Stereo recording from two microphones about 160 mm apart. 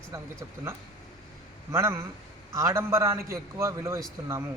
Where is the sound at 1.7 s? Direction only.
15° right (ahead or behind).